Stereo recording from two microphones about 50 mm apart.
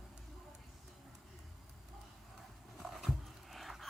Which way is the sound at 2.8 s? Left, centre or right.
Centre.